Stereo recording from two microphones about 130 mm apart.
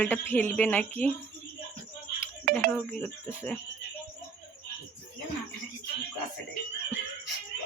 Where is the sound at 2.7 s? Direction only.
15° left (ahead or behind).